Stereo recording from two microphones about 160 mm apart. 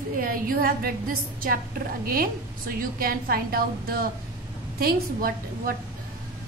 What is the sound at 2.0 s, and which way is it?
A woman's voice, 65° right (ahead or behind).